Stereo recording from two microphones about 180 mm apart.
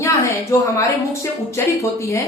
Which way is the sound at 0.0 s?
15° left (ahead or behind).